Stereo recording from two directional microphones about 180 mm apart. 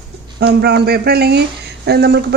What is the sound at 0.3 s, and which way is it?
Speech, 65° right (ahead or behind).